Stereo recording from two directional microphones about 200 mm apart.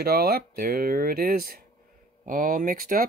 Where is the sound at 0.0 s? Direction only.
50° right (ahead or behind).